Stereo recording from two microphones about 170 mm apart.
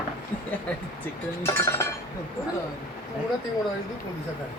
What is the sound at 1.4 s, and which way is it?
Speech, 15° left (ahead or behind).